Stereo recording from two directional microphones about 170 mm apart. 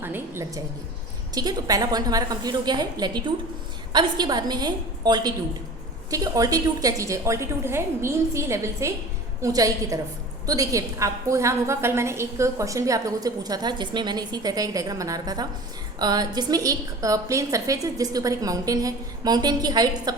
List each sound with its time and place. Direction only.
0.0 s a woman's voice: 15° right (ahead or behind)